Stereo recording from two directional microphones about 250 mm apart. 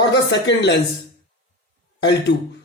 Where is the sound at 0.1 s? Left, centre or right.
Left.